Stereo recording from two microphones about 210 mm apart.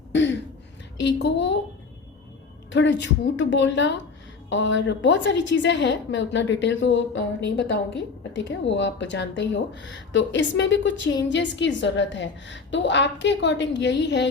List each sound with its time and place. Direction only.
0.1 s a sound: 60° left (ahead or behind)
1.0 s a woman's voice: 55° left (ahead or behind)
2.7 s a woman's voice: 55° left (ahead or behind)